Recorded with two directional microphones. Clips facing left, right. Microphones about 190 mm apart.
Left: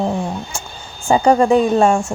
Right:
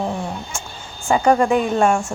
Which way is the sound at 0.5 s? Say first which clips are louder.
Left 2 dB; 35° left (ahead or behind).